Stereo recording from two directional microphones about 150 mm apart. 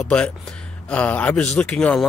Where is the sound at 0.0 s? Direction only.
5° left (ahead or behind).